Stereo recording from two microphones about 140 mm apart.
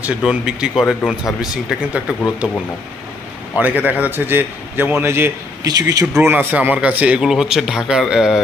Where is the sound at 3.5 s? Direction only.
10° right (ahead or behind); by 6.0 s 25° right (ahead or behind).